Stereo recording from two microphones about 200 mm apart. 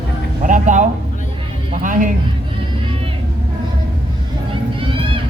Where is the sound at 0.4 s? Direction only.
40° right (ahead or behind).